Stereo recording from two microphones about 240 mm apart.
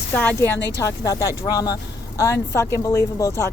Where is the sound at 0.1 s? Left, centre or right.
Centre.